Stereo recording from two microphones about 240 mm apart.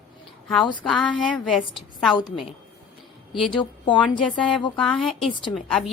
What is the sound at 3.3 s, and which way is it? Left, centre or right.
Speech, centre.